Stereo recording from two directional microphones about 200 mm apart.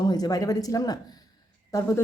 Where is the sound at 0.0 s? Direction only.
20° left (ahead or behind).